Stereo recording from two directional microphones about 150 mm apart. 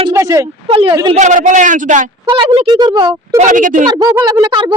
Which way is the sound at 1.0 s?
50° right (ahead or behind).